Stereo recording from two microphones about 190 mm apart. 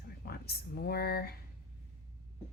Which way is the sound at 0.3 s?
55° left (ahead or behind).